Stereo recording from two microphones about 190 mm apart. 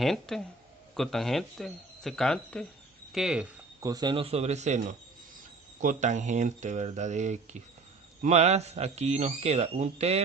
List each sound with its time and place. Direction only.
0.0 s speech: centre (ahead or behind)
3.8 s a man's voice: 20° right (ahead or behind); by 10.2 s 35° right (ahead or behind)